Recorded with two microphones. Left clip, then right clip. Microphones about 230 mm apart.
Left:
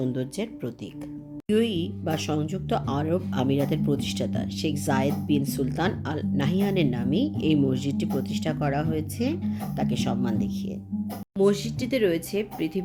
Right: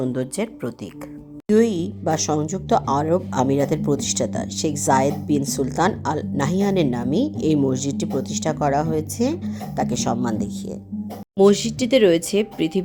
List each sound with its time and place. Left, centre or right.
0.0 s speech: centre
11.3 s speech: right